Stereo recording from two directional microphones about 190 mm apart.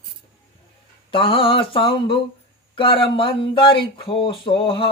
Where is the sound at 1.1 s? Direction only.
30° left (ahead or behind).